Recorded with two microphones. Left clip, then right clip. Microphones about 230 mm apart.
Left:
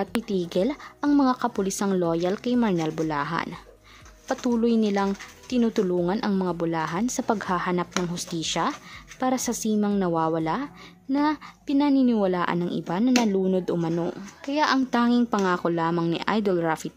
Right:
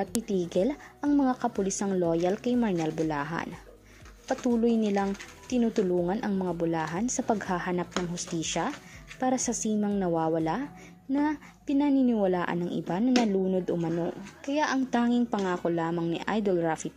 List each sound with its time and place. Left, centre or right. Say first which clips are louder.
0.0 s speech: left 3 dB; centre